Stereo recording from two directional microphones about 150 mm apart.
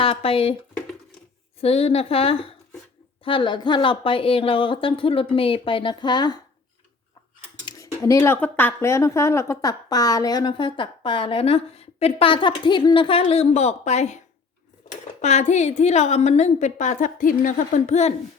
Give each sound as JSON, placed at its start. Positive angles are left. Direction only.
{"t": 0.0, "sound": "speech", "side_deg": 40}
{"t": 1.6, "sound": "speech", "side_deg": 40}
{"t": 7.6, "sound": "speech", "side_deg": 20}
{"t": 15.2, "sound": "a woman's voice", "side_deg": 50}